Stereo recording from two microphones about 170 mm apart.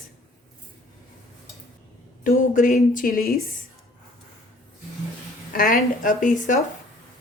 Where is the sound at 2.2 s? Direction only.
50° left (ahead or behind).